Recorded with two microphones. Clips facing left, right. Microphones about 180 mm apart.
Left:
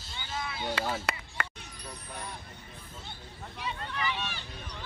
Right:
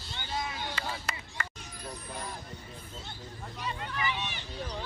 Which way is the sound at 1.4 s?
65° left (ahead or behind).